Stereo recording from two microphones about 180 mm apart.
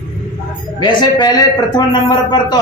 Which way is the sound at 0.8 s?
25° left (ahead or behind).